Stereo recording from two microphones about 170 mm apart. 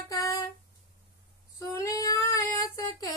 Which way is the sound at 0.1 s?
20° left (ahead or behind).